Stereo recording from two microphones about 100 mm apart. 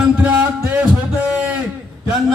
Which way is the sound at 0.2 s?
15° right (ahead or behind).